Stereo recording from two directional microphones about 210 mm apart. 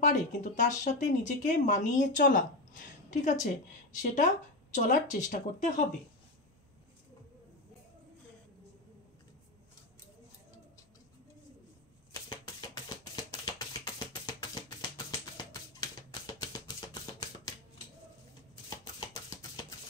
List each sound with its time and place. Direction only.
0.0 s speech: 35° left (ahead or behind)
12.3 s music: 20° left (ahead or behind)
18.7 s a sound: 20° left (ahead or behind)